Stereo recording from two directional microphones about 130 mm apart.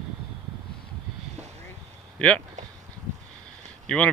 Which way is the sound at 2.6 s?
65° right (ahead or behind).